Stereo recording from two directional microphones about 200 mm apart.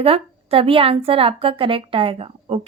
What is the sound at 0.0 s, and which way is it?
A woman's voice, 30° right (ahead or behind).